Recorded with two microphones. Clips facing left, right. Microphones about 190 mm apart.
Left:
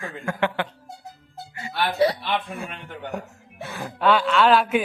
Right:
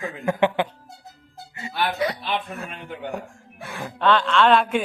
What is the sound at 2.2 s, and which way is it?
Speech, centre (ahead or behind).